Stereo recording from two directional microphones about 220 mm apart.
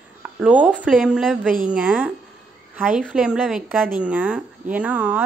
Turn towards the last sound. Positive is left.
turn(degrees=-5)  # may be behind; listen again after turning